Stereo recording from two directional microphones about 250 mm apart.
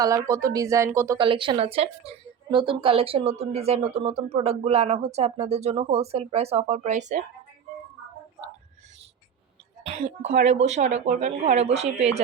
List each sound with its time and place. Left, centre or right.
0.0 s speech: centre
9.8 s speech: right